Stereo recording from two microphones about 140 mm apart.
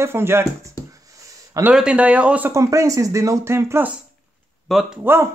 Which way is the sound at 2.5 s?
20° right (ahead or behind).